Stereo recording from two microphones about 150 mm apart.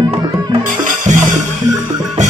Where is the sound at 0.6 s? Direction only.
60° right (ahead or behind).